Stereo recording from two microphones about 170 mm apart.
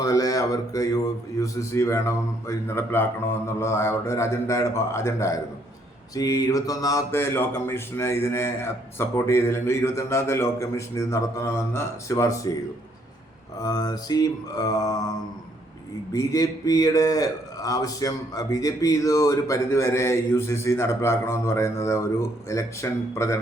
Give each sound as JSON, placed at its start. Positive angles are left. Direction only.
{"t": 0.0, "sound": "a man's voice", "side_deg": 20}
{"t": 13.6, "sound": "mantra", "side_deg": 20}
{"t": 16.1, "sound": "a man's voice", "side_deg": 20}